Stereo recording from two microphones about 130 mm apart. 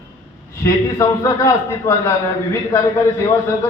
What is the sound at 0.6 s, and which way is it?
A man's voice, 25° left (ahead or behind).